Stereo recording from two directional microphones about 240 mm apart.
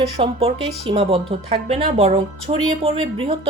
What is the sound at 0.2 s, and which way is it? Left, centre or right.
Speech, right.